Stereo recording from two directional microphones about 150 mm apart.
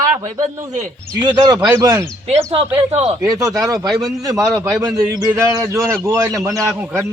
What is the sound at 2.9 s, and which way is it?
Speech, 45° right (ahead or behind).